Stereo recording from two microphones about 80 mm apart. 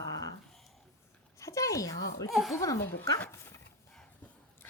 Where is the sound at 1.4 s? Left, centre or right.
Left.